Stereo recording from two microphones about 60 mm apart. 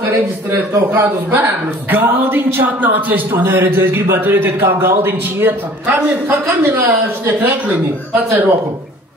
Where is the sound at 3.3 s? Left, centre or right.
Right.